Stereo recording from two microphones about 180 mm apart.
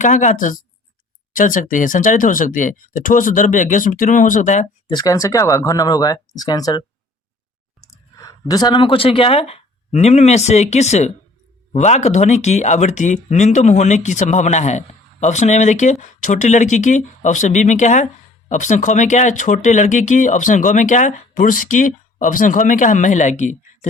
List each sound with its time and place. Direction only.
0.0 s a man's voice: 45° left (ahead or behind)
4.9 s a man's voice: 20° left (ahead or behind); by 23.6 s 40° left (ahead or behind)